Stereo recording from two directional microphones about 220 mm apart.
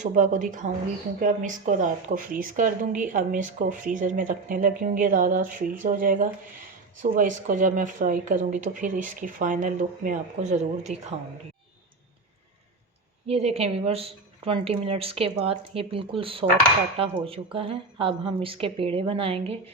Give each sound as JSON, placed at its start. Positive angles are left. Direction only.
{"t": 0.0, "sound": "speech", "side_deg": -35}
{"t": 13.2, "sound": "a woman's voice", "side_deg": -25}